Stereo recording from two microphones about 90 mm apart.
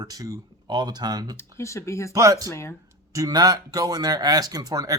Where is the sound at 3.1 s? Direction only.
45° right (ahead or behind).